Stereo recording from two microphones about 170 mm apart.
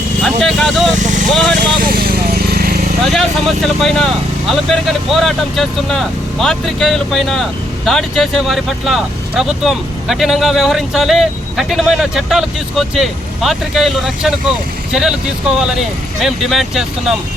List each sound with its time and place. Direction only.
0.2 s speech: centre (ahead or behind)
0.9 s speech: 45° right (ahead or behind)
1.3 s speech: centre (ahead or behind)
1.8 s speech: 60° right (ahead or behind)
3.1 s speech: centre (ahead or behind)
16.2 s speech: centre (ahead or behind)